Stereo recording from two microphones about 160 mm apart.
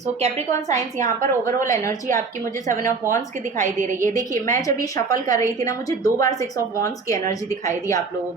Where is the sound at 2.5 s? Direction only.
55° right (ahead or behind).